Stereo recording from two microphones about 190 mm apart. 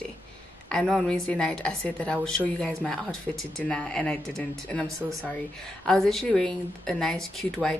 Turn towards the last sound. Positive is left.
turn(degrees=0)  # may be behind; listen again after turning